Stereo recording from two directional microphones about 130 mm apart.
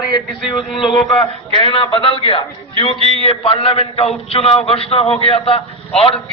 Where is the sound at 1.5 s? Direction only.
40° left (ahead or behind).